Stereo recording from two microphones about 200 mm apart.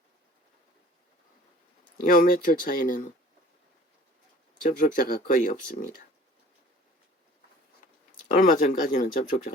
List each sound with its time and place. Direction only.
2.0 s speech: 45° left (ahead or behind)
4.6 s speech: 45° left (ahead or behind)
8.3 s speech: 40° left (ahead or behind)